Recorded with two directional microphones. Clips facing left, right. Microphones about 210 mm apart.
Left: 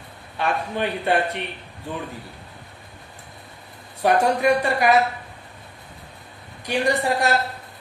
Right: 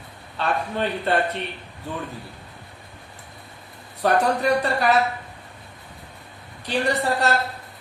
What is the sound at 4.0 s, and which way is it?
Speech, 15° left (ahead or behind).